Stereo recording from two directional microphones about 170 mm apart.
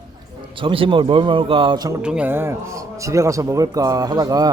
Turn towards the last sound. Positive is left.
turn(degrees=-20)  # may be behind; listen again after turning